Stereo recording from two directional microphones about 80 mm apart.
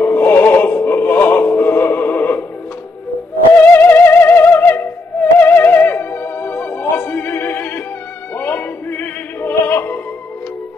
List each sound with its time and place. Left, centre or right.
0.0 s music: left
3.7 s music: left
8.4 s opera: left